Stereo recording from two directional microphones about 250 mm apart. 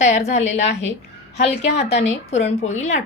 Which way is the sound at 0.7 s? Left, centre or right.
Left.